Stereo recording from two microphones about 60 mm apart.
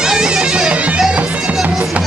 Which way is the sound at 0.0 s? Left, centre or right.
Centre.